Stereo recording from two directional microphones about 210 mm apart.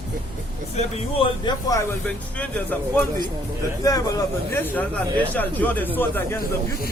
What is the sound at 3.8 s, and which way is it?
A man's voice, 15° left (ahead or behind).